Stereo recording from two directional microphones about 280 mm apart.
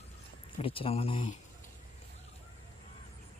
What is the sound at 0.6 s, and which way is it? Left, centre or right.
Speech, centre.